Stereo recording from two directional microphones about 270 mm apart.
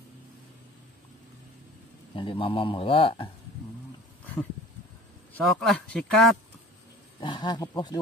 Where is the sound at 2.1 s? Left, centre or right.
Centre.